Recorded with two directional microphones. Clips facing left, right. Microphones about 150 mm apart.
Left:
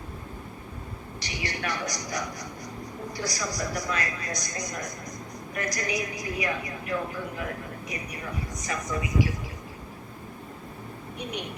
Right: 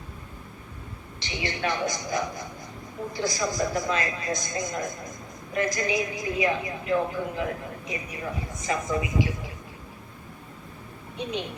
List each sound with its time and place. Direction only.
1.2 s a woman's voice: 25° right (ahead or behind)
11.2 s a woman's voice: 25° right (ahead or behind)